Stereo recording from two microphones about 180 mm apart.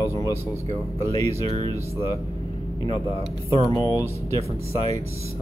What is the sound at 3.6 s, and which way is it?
Speech, 20° left (ahead or behind).